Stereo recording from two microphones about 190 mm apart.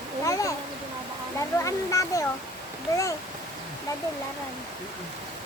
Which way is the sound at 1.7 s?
15° left (ahead or behind).